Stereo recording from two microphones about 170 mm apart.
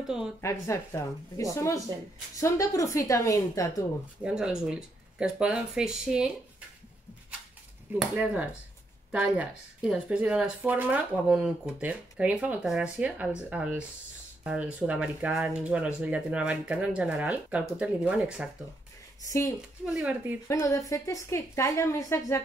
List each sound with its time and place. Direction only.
0.0 s speech: 5° right (ahead or behind)
0.4 s a woman's voice: 15° left (ahead or behind)
4.2 s speech: 5° right (ahead or behind)
8.2 s speech: 5° right (ahead or behind)
19.2 s speech: 15° left (ahead or behind)
19.9 s speech: 5° right (ahead or behind)
20.4 s speech: 15° left (ahead or behind)